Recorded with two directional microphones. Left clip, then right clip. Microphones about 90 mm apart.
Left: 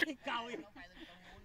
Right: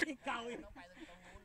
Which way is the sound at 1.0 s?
35° right (ahead or behind).